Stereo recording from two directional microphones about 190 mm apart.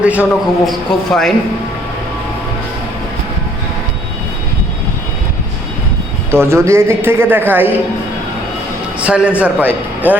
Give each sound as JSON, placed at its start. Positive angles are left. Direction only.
{"t": 0.0, "sound": "a man's voice", "side_deg": -5}
{"t": 6.3, "sound": "speech", "side_deg": -15}
{"t": 9.0, "sound": "speech", "side_deg": -5}